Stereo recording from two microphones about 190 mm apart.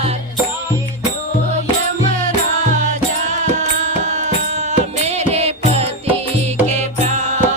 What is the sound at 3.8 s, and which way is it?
Music, 40° right (ahead or behind).